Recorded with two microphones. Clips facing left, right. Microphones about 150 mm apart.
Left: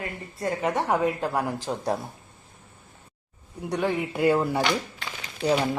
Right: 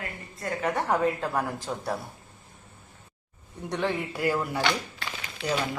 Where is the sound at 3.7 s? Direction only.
10° left (ahead or behind).